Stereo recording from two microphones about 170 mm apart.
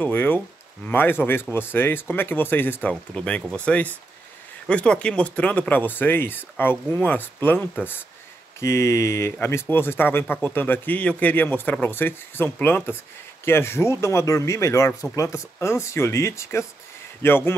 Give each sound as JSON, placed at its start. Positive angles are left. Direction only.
{"t": 0.0, "sound": "speech", "side_deg": 10}